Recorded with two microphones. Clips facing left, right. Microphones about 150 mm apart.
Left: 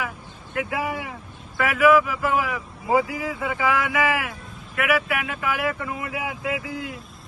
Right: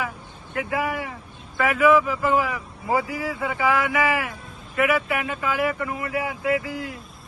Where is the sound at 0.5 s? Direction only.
15° left (ahead or behind).